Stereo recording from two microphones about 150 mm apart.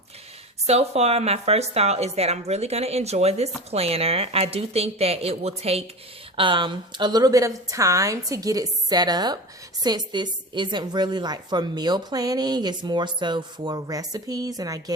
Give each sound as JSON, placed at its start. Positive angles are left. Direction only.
{"t": 0.7, "sound": "a woman's voice", "side_deg": -45}